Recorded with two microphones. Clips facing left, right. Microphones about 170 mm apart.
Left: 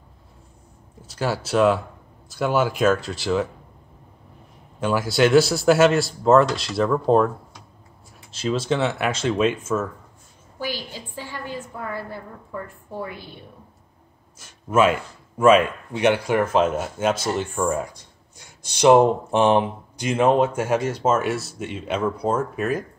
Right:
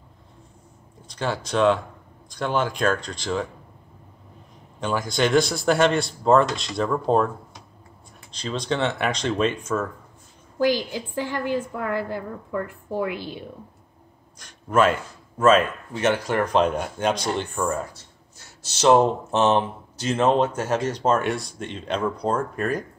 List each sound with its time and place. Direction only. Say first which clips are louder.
1.0 s a man's voice: left 2 dB; 5° left (ahead or behind)
4.7 s a man's voice: left 4 dB; 5° left (ahead or behind)
8.3 s a man's voice: left 4 dB; 5° left (ahead or behind)
11.3 s a woman's voice: right 6 dB; 80° right
14.4 s speech: left 1 dB; 10° left (ahead or behind)